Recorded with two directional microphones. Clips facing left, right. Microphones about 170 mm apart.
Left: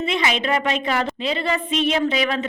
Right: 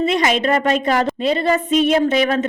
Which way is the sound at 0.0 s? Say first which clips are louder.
Right 5 dB; 45° right (ahead or behind).